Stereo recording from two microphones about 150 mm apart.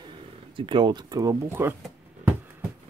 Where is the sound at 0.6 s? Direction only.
30° right (ahead or behind); by 1.8 s 15° right (ahead or behind).